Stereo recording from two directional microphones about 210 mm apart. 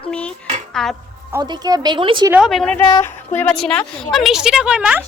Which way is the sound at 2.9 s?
15° left (ahead or behind).